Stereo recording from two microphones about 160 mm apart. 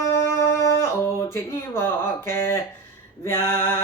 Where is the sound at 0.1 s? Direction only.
15° left (ahead or behind).